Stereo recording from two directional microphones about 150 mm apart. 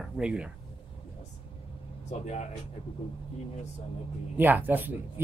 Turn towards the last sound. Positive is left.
turn(degrees=-15)  # may be behind; listen again after turning